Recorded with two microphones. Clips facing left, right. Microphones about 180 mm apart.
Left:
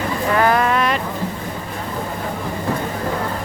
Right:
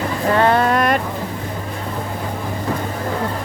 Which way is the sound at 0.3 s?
30° right (ahead or behind).